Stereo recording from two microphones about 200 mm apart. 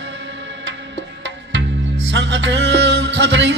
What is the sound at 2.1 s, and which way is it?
Music, 65° right (ahead or behind).